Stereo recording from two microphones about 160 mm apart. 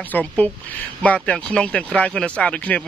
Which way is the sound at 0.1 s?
10° left (ahead or behind).